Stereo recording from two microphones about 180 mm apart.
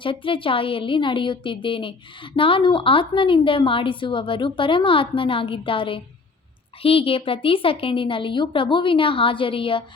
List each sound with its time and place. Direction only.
0.0 s a woman's voice: 30° left (ahead or behind)